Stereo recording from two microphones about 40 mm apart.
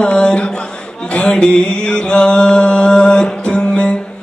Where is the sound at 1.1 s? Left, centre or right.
Left.